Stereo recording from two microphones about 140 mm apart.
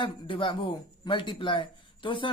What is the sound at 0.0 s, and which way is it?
Speech, 35° left (ahead or behind).